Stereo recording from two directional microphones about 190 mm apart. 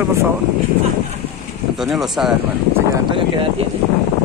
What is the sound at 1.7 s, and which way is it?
Speech, centre (ahead or behind).